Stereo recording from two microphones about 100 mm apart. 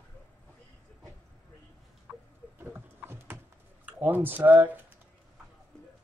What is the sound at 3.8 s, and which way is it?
Speech, 20° right (ahead or behind).